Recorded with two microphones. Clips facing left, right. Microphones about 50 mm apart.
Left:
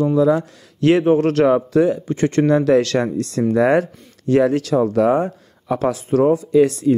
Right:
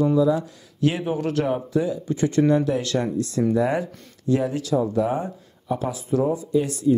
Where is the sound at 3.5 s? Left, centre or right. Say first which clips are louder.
Left 7 dB; left.